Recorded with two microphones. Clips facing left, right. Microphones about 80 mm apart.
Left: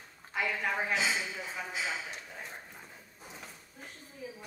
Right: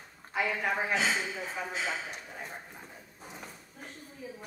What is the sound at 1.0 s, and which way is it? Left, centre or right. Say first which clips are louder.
Speech: right 2 dB; right.